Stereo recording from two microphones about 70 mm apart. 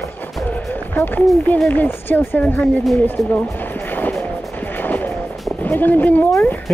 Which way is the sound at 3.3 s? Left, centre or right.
Left.